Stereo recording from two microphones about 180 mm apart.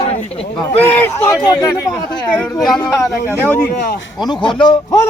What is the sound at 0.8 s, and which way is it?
Speech, 10° left (ahead or behind).